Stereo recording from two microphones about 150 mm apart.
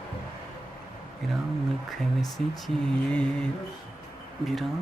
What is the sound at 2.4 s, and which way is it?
Speech, centre (ahead or behind).